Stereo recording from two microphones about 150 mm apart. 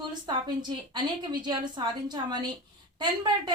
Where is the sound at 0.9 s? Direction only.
30° right (ahead or behind).